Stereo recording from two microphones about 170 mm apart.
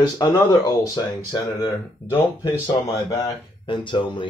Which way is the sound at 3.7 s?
30° left (ahead or behind).